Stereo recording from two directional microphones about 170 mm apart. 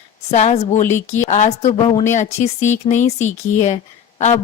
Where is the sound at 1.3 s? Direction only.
40° left (ahead or behind).